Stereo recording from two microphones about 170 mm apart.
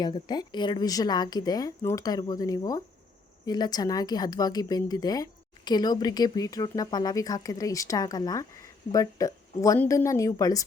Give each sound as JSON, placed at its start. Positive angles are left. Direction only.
{"t": 0.0, "sound": "speech", "side_deg": 25}